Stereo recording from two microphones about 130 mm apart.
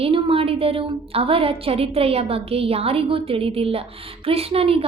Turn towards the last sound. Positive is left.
turn(degrees=-50)  # may be behind; listen again after turning